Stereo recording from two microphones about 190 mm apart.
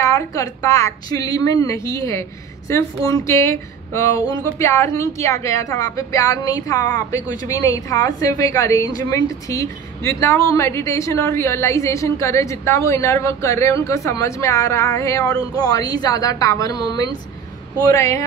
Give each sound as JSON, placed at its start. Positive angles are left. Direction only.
{"t": 0.0, "sound": "a woman's voice", "side_deg": 15}